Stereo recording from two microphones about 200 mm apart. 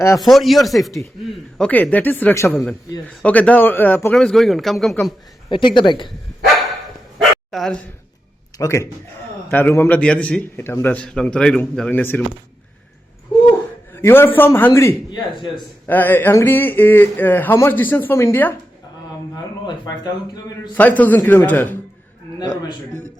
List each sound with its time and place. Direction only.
0.2 s a man's voice: centre (ahead or behind)
5.5 s speech: 25° left (ahead or behind)
7.2 s dog: centre (ahead or behind)
8.5 s a man's voice: 15° left (ahead or behind)
13.9 s a man's voice: 10° left (ahead or behind)
20.7 s a man's voice: 10° left (ahead or behind)
22.4 s speech: 20° left (ahead or behind)